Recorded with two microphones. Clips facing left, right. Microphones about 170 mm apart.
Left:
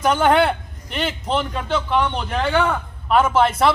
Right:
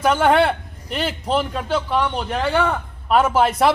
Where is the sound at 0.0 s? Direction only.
5° right (ahead or behind).